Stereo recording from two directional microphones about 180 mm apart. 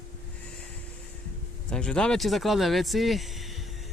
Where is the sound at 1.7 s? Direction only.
5° left (ahead or behind).